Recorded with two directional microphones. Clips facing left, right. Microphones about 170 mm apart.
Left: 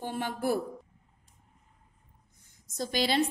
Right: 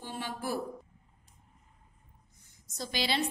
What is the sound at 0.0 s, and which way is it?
Speech, 50° left (ahead or behind).